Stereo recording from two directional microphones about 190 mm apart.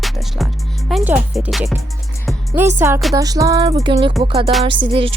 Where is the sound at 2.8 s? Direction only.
15° right (ahead or behind); by 5.1 s 30° right (ahead or behind).